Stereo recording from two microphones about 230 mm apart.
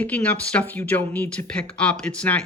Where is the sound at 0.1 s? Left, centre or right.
Centre.